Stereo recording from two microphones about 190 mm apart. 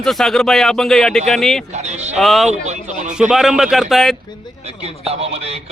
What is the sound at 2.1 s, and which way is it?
Speech, centre (ahead or behind).